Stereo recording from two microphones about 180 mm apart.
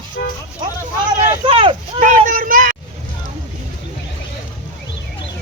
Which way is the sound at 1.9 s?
45° right (ahead or behind).